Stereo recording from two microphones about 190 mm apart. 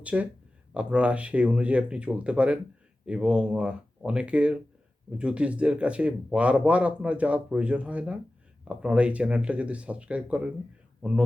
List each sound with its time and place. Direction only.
0.0 s speech: 5° right (ahead or behind)